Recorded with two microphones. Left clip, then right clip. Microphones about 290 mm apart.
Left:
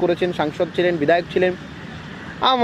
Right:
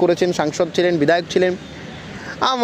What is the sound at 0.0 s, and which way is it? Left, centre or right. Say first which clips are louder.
Speech: right 3 dB; right.